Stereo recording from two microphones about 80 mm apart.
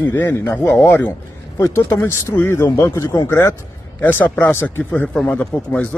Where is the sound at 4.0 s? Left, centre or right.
Left.